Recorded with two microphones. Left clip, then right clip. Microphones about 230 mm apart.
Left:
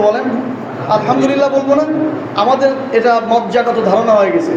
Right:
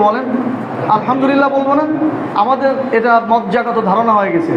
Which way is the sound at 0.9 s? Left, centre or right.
Right.